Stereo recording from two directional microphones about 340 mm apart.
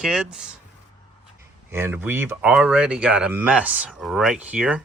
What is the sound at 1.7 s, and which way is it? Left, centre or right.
Speech, centre.